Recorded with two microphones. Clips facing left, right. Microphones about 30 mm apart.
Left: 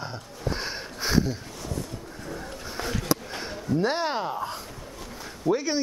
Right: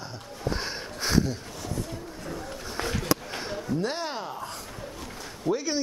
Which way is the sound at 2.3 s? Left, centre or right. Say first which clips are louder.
Right 1 dB; centre.